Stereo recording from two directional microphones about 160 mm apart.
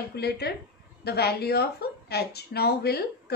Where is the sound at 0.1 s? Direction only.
90° left.